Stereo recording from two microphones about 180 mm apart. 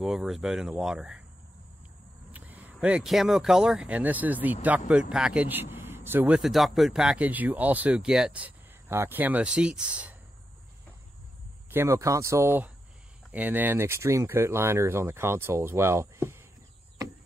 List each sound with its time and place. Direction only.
0.0 s speech: centre (ahead or behind)
2.3 s speech: 10° right (ahead or behind)
11.7 s speech: 15° right (ahead or behind)